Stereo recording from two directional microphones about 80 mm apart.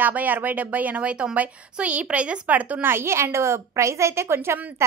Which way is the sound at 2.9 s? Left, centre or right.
Right.